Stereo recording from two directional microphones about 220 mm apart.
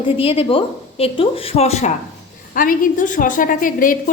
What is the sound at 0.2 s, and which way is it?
A woman's voice, 25° left (ahead or behind).